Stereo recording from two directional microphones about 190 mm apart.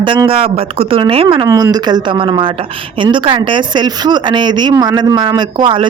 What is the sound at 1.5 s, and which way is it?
Speech, 20° right (ahead or behind).